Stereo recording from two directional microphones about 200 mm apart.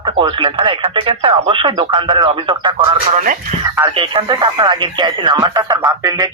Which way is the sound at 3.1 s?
40° right (ahead or behind).